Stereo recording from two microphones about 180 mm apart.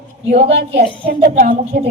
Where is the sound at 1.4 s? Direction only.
55° right (ahead or behind).